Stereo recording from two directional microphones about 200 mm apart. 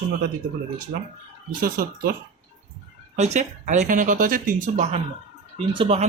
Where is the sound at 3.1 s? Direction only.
35° right (ahead or behind).